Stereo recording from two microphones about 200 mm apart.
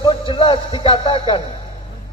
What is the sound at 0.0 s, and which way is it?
Speech, 25° left (ahead or behind).